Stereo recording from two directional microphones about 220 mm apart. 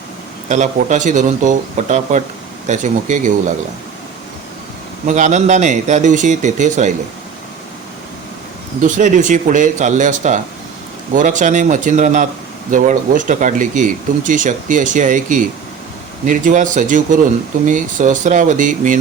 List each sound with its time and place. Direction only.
0.4 s speech: 35° right (ahead or behind)
5.0 s speech: 35° right (ahead or behind)
8.8 s speech: 35° right (ahead or behind)